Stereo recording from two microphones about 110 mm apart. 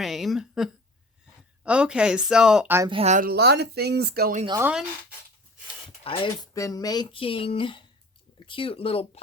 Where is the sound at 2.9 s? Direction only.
70° right (ahead or behind).